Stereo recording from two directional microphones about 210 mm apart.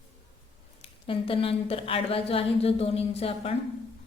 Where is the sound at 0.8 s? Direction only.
25° left (ahead or behind).